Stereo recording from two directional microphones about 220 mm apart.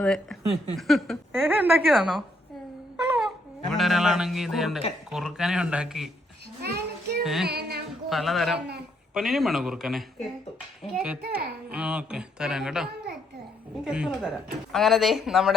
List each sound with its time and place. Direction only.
0.0 s speech: centre (ahead or behind)
6.6 s child singing: 45° right (ahead or behind)
7.4 s music: 45° right (ahead or behind)
8.1 s speech: centre (ahead or behind)
11.2 s a child's voice: 45° right (ahead or behind)
11.7 s speech: 5° right (ahead or behind)